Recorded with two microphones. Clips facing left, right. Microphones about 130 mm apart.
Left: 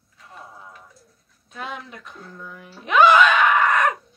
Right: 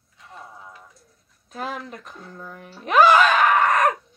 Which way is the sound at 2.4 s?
40° right (ahead or behind).